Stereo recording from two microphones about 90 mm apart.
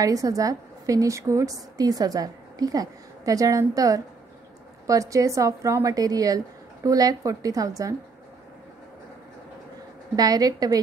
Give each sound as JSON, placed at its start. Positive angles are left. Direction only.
{"t": 0.0, "sound": "a woman's voice", "side_deg": -40}
{"t": 10.1, "sound": "a woman's voice", "side_deg": -45}